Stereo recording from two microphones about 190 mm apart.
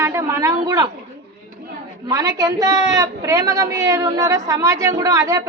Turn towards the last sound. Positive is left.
turn(degrees=-15)  # may be behind; listen again after turning